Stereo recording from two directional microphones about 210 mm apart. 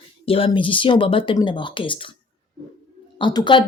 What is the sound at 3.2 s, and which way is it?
Speech, 20° left (ahead or behind).